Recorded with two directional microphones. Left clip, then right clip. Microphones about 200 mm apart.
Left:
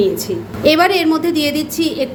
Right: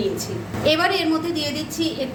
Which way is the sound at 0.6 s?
35° left (ahead or behind).